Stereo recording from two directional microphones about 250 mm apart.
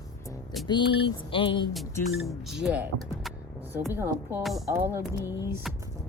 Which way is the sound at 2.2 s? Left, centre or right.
Centre.